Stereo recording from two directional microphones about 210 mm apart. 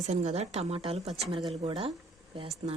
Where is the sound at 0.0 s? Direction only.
30° right (ahead or behind).